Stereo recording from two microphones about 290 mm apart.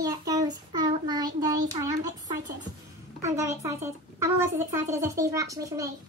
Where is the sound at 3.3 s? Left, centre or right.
Centre.